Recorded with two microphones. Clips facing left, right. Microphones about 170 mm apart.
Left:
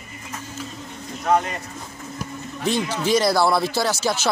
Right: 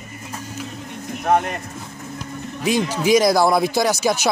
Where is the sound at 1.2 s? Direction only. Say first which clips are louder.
Right 2 dB; 55° right (ahead or behind).